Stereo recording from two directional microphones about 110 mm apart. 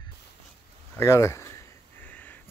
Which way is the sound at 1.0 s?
25° left (ahead or behind).